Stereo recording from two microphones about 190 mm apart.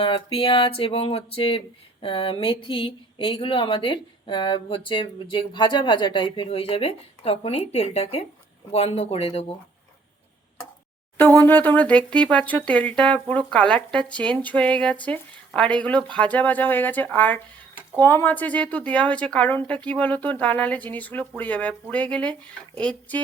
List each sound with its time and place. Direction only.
0.0 s a sound: 30° left (ahead or behind)
8.7 s speech: 35° left (ahead or behind)
11.2 s a woman's voice: 10° left (ahead or behind)